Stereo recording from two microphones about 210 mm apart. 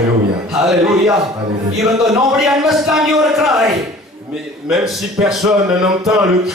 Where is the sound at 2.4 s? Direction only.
Centre (ahead or behind).